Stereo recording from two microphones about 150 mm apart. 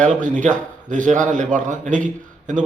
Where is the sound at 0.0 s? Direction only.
55° right (ahead or behind).